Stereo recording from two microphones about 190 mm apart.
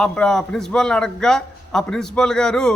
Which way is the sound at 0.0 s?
5° left (ahead or behind).